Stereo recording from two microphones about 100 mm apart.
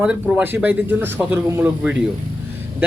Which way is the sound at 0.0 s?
10° right (ahead or behind).